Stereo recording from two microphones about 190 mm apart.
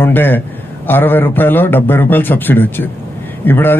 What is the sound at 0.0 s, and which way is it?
Speech, 10° left (ahead or behind).